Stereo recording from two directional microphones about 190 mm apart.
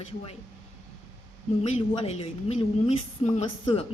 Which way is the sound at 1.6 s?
35° left (ahead or behind).